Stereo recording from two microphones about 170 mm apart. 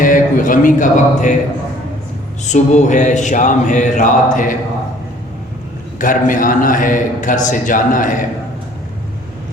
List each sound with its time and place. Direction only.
0.0 s a sound: 50° left (ahead or behind)
2.5 s a man's voice: 45° left (ahead or behind)
6.0 s a man's voice: 50° left (ahead or behind)